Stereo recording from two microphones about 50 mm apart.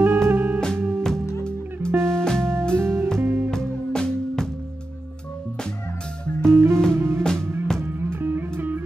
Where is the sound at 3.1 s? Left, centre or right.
Right.